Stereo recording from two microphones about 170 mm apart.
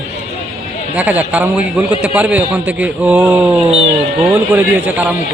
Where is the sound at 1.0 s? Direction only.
10° right (ahead or behind).